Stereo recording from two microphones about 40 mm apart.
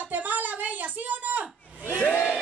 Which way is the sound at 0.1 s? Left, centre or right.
Right.